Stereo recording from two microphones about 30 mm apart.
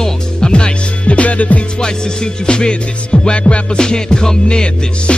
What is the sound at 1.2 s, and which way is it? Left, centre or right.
Music, left.